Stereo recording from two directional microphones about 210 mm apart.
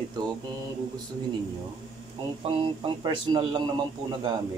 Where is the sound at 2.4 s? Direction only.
25° right (ahead or behind).